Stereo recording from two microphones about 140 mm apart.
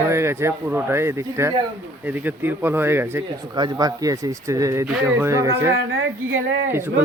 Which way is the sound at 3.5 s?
30° right (ahead or behind).